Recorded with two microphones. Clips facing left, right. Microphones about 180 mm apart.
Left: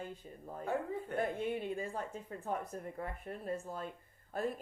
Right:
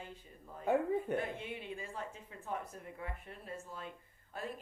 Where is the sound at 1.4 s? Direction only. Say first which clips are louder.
Left 7 dB; 45° left (ahead or behind).